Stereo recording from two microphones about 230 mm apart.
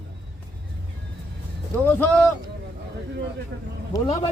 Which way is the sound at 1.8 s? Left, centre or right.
Centre.